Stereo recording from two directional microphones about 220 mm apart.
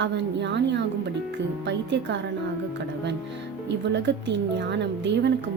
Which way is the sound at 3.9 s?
50° right (ahead or behind).